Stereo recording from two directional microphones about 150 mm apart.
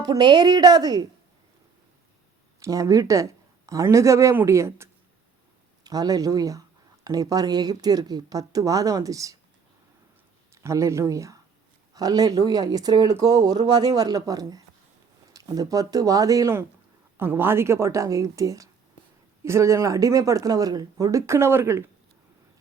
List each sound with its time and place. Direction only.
0.0 s speech: 25° right (ahead or behind)
2.6 s speech: 20° right (ahead or behind)
10.5 s speech: 20° right (ahead or behind)